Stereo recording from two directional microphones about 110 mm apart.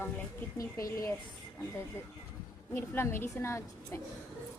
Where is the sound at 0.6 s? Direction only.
30° left (ahead or behind).